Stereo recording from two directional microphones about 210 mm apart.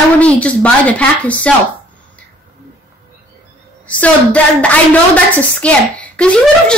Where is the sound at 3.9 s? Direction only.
5° left (ahead or behind).